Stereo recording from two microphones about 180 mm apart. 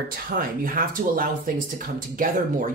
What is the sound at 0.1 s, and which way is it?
Speech, 50° right (ahead or behind).